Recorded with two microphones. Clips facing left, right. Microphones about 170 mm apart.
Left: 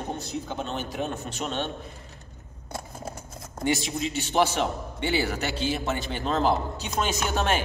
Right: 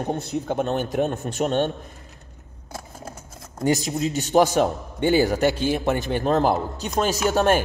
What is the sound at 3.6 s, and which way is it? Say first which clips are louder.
A man's voice: right 5 dB; 40° right (ahead or behind).